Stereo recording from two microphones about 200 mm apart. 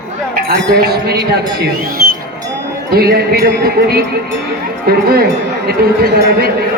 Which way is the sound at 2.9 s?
50° right (ahead or behind).